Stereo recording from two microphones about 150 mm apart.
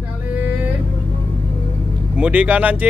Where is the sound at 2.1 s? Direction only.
10° right (ahead or behind).